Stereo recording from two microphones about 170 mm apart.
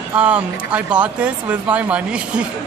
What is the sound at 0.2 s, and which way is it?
Speech, 5° right (ahead or behind).